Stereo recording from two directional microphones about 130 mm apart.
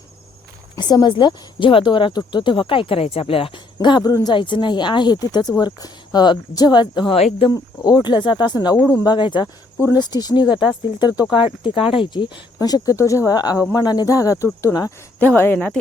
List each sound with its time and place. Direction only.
0.8 s a woman's voice: 35° left (ahead or behind)
7.2 s speech: 50° left (ahead or behind)
7.9 s a woman's voice: 35° left (ahead or behind)
10.5 s speech: 5° right (ahead or behind)
11.0 s speech: 35° left (ahead or behind)
15.2 s speech: 15° left (ahead or behind)